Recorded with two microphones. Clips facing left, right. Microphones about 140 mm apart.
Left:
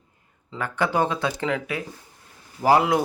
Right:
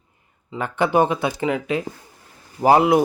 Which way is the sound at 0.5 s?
20° right (ahead or behind).